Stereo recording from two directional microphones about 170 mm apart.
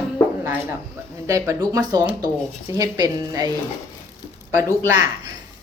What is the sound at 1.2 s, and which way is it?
A woman's voice, 20° right (ahead or behind).